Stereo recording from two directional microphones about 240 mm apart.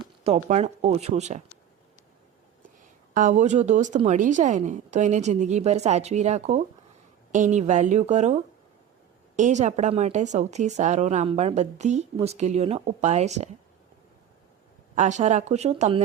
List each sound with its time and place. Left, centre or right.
0.0 s speech: right
3.2 s speech: right
14.9 s speech: right